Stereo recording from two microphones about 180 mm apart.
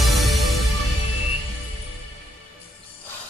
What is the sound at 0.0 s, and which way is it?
Music, centre (ahead or behind).